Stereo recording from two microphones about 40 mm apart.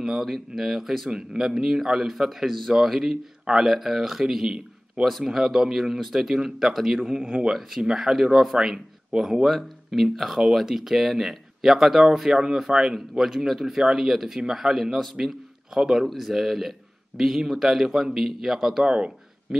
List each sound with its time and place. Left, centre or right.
0.2 s speech: centre
7.3 s speech: right
7.8 s a man's voice: centre
18.9 s speech: right